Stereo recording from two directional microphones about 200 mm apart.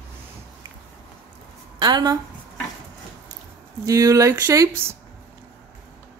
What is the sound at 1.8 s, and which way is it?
Speech, 20° right (ahead or behind).